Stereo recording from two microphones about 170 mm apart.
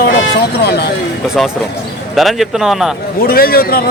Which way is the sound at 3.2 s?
60° left (ahead or behind).